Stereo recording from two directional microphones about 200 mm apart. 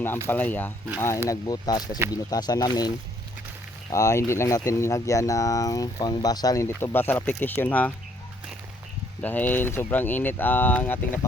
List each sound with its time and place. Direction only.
0.3 s speech: 10° left (ahead or behind)
9.2 s speech: 10° left (ahead or behind)